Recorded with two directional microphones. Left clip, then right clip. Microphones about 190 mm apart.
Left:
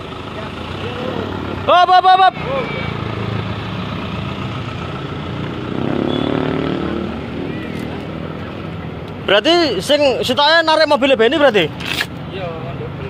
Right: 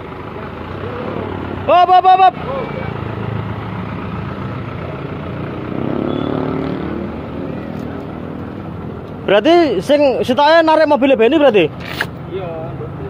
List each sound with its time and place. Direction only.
1.7 s speech: 10° right (ahead or behind)
9.2 s a man's voice: 30° right (ahead or behind)